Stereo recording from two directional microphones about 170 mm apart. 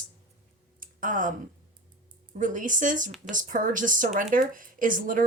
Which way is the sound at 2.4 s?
50° right (ahead or behind).